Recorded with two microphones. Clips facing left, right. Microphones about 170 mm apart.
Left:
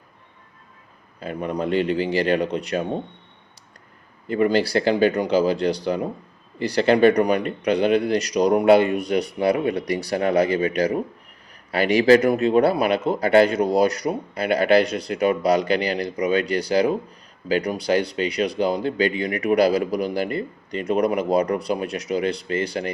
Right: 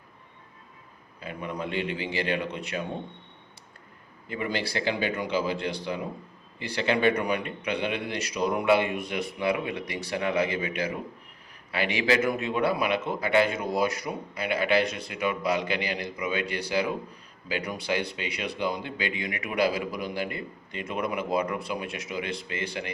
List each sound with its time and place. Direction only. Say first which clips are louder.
1.3 s speech: left 9 dB; 40° left (ahead or behind)
4.3 s speech: left 11 dB; 40° left (ahead or behind)